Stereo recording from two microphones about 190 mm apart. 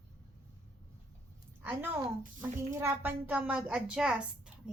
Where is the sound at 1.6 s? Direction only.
10° right (ahead or behind).